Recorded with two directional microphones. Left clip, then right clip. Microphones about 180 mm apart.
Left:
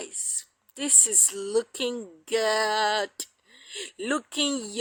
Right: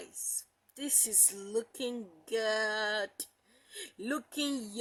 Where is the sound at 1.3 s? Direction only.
15° left (ahead or behind).